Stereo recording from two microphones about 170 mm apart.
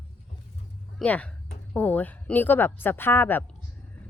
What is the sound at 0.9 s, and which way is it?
Speech, 10° left (ahead or behind).